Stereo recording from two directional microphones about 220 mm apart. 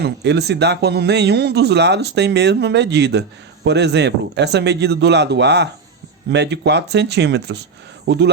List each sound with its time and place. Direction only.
0.0 s speech: 50° right (ahead or behind)